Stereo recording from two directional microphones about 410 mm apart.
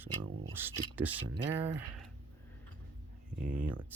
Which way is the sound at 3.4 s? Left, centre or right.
Centre.